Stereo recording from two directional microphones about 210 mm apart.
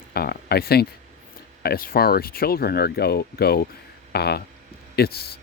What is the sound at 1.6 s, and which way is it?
Speech, 45° left (ahead or behind).